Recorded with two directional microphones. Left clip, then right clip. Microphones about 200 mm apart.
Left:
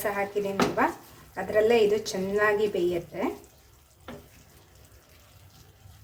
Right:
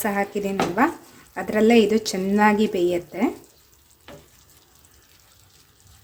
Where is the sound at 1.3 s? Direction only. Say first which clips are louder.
Right 4 dB; 50° right (ahead or behind).